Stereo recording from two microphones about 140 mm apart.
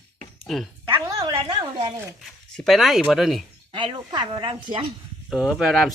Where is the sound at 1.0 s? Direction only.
30° right (ahead or behind).